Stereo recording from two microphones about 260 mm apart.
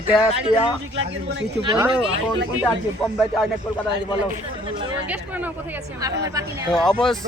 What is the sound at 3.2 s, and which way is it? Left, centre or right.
Speech, centre.